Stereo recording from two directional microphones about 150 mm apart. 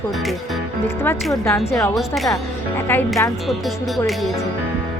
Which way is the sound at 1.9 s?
Centre (ahead or behind).